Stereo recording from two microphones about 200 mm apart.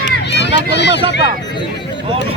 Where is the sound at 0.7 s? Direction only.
60° left (ahead or behind).